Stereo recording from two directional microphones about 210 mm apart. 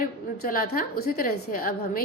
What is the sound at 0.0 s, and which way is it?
A woman's voice, 45° left (ahead or behind).